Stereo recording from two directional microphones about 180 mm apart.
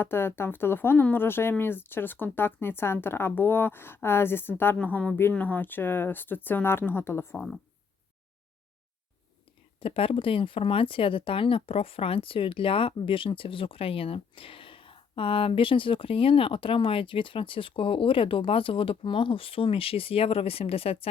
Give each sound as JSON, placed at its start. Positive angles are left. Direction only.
{"t": 0.0, "sound": "speech", "side_deg": 10}
{"t": 9.8, "sound": "speech", "side_deg": 30}